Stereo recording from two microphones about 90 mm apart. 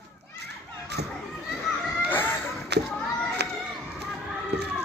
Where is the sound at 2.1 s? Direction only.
25° left (ahead or behind).